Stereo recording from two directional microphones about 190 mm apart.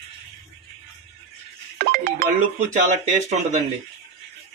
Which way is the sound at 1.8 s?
55° right (ahead or behind).